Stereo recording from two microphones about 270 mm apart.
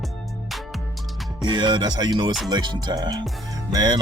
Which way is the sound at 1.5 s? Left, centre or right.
Centre.